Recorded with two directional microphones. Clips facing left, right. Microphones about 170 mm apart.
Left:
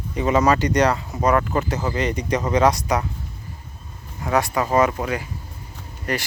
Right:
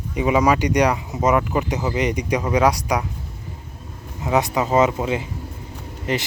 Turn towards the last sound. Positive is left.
turn(degrees=-20)  # may be behind; listen again after turning